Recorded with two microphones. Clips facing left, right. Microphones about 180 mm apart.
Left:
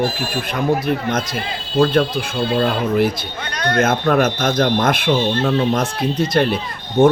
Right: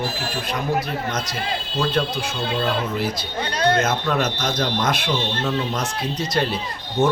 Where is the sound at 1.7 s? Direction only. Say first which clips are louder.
Left 8 dB; 55° left (ahead or behind).